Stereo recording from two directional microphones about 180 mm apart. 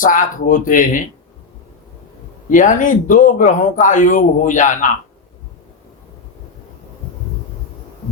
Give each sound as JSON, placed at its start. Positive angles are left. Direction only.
{"t": 0.0, "sound": "speech", "side_deg": 45}
{"t": 2.5, "sound": "speech", "side_deg": 45}